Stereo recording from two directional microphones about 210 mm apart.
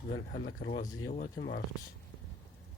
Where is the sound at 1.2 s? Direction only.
50° left (ahead or behind).